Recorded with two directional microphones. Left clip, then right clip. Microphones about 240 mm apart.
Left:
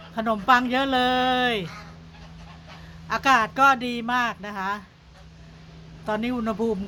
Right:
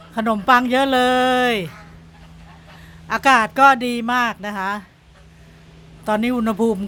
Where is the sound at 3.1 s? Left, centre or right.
Right.